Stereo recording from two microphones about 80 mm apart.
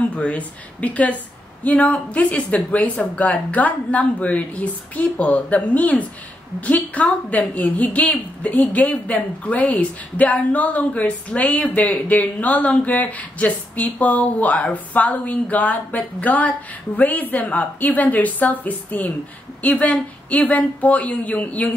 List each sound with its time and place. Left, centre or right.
0.1 s a woman's voice: centre